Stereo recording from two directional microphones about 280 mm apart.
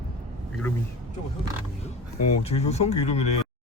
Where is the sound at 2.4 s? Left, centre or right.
Left.